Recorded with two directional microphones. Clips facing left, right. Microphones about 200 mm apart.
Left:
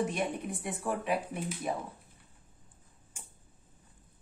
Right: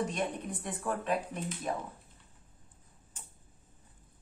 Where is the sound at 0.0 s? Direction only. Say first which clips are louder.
Left 2 dB; 10° left (ahead or behind).